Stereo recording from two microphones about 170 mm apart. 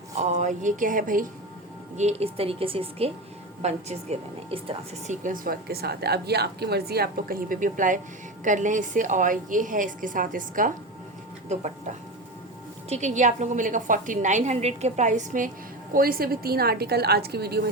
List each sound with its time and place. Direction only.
0.2 s a woman's voice: 45° right (ahead or behind)
2.0 s speech: 40° right (ahead or behind)
5.1 s a woman's voice: 50° right (ahead or behind)
15.9 s a woman's voice: 60° right (ahead or behind)